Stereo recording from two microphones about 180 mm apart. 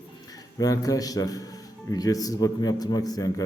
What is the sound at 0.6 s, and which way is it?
A man's voice, 20° left (ahead or behind).